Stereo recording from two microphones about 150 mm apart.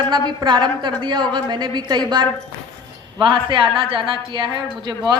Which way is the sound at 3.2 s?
35° right (ahead or behind).